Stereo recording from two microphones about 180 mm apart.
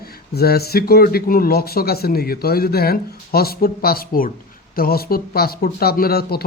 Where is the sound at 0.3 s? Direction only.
60° left (ahead or behind).